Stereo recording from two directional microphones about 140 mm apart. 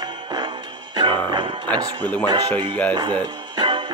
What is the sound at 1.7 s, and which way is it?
Speech, 30° right (ahead or behind).